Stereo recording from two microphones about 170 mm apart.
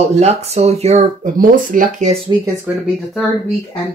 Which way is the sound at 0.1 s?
40° right (ahead or behind).